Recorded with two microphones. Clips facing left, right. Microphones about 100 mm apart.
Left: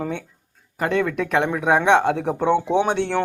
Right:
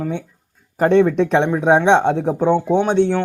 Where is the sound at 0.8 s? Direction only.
30° right (ahead or behind); by 2.6 s 15° right (ahead or behind).